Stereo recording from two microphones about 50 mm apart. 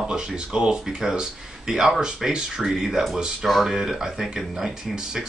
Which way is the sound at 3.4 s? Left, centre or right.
Centre.